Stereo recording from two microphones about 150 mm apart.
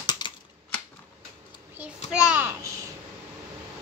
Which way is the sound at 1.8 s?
5° right (ahead or behind).